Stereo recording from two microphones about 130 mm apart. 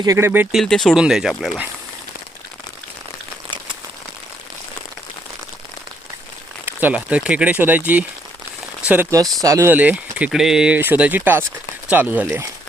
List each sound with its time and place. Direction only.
0.0 s speech: 20° right (ahead or behind)
0.5 s speech: 5° left (ahead or behind)
6.7 s speech: 15° right (ahead or behind)
8.9 s speech: 20° right (ahead or behind)
9.7 s speech: 10° right (ahead or behind)